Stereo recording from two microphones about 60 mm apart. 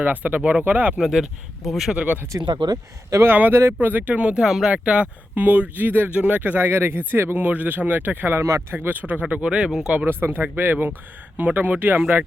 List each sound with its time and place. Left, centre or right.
0.0 s speech: right
0.9 s speech: centre
2.3 s speech: right
3.2 s speech: right
4.4 s speech: centre
4.7 s speech: right
7.3 s speech: right
8.4 s speech: right
8.7 s speech: right
9.3 s speech: centre
9.6 s speech: centre
10.1 s speech: right